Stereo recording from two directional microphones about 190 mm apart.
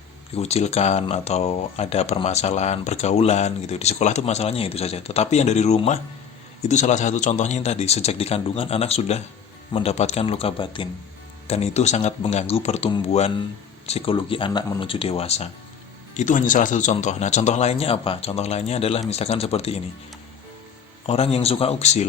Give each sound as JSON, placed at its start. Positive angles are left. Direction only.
{"t": 0.3, "sound": "speech", "side_deg": 35}
{"t": 21.1, "sound": "speech", "side_deg": 30}